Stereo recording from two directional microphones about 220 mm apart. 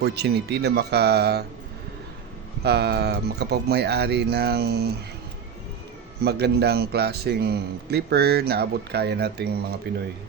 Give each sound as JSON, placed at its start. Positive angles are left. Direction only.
{"t": 0.0, "sound": "a man's voice", "side_deg": -50}
{"t": 2.6, "sound": "a man's voice", "side_deg": -50}
{"t": 6.2, "sound": "a man's voice", "side_deg": -45}